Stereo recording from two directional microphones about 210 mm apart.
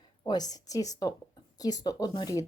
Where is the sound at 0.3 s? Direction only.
20° left (ahead or behind).